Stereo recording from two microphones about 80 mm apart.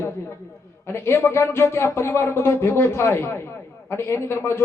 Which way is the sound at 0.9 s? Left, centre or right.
Left.